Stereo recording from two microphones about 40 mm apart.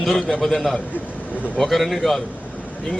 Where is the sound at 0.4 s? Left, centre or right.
Centre.